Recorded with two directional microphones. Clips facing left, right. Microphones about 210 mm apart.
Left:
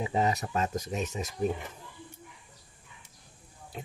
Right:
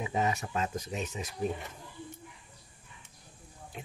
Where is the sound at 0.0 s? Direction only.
35° left (ahead or behind).